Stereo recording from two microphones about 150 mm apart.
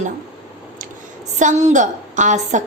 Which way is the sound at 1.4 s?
55° right (ahead or behind).